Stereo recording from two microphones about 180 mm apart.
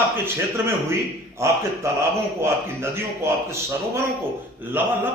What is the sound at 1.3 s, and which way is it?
A man's voice, 15° right (ahead or behind).